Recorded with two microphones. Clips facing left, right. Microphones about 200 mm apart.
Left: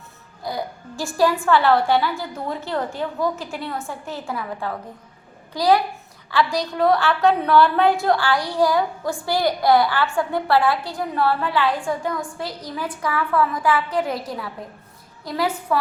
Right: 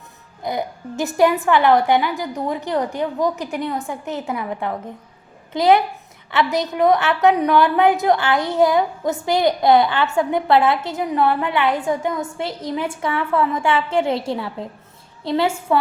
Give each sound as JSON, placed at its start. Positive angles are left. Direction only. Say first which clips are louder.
{"t": 0.4, "sound": "a woman's voice", "louder": "right 4 dB", "side_deg": -20}